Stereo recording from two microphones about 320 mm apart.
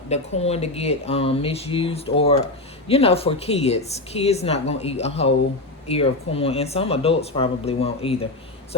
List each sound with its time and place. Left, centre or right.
0.1 s a woman's voice: centre